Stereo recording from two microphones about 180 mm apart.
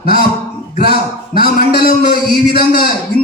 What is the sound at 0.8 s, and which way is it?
Music, 60° left (ahead or behind).